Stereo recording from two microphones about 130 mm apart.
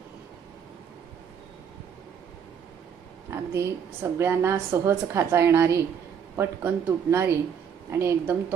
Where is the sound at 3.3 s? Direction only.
20° right (ahead or behind).